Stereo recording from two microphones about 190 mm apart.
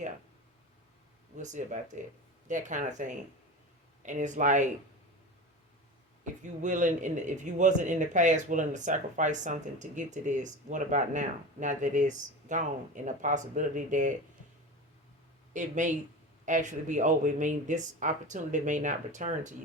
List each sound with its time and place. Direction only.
1.4 s speech: 40° right (ahead or behind)
6.4 s speech: 40° right (ahead or behind)
15.5 s speech: 40° right (ahead or behind)